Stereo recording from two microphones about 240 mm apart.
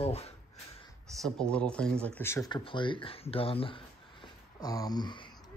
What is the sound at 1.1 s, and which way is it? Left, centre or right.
Speech, centre.